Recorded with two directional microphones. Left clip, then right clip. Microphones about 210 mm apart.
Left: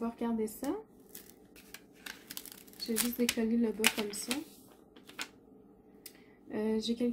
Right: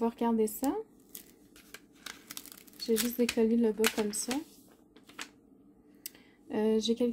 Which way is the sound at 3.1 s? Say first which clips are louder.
Right 2 dB; 50° right (ahead or behind).